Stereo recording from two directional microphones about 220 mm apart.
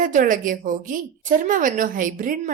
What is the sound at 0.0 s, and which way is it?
A woman's voice, 35° right (ahead or behind).